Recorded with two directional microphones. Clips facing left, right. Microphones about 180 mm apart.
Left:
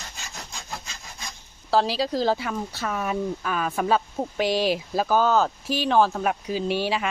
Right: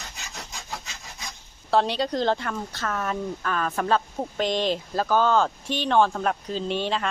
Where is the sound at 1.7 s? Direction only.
Centre (ahead or behind).